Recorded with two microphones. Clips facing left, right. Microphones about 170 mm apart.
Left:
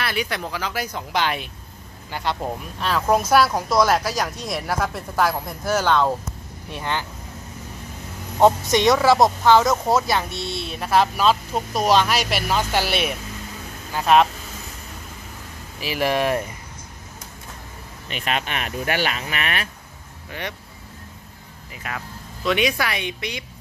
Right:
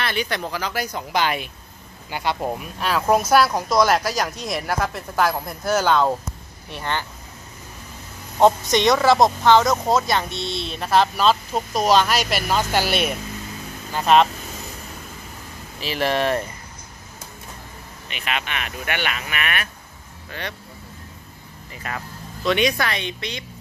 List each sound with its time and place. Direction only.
0.0 s speech: 5° left (ahead or behind)
6.7 s speech: 10° left (ahead or behind)
8.7 s speech: 10° left (ahead or behind)
15.8 s speech: 10° left (ahead or behind)
18.1 s speech: 40° left (ahead or behind)
20.2 s speech: 20° left (ahead or behind)
21.8 s speech: 5° left (ahead or behind)